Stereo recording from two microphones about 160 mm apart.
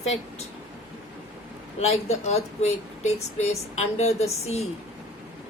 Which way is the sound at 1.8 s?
40° left (ahead or behind).